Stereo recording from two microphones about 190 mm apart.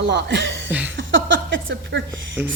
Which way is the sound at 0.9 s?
80° right.